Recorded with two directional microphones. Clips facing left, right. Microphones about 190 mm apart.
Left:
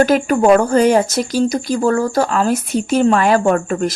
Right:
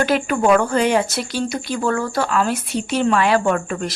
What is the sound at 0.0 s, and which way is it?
Speech, 40° left (ahead or behind).